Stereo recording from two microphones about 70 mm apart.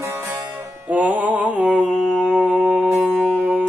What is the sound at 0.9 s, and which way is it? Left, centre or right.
Mantra, right.